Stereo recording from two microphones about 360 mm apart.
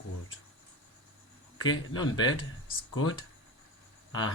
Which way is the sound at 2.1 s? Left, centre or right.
Left.